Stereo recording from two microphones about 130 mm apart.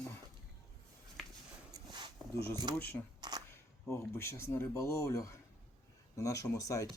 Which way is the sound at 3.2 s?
30° right (ahead or behind).